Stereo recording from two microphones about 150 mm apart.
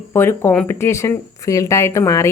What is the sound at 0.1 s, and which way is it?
A woman's voice, 15° left (ahead or behind).